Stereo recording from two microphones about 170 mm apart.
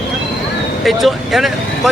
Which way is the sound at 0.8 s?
Centre (ahead or behind).